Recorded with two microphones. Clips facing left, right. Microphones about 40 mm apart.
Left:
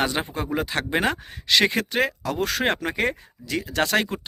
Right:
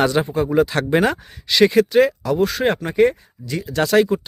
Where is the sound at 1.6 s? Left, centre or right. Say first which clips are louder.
Right 9 dB; left.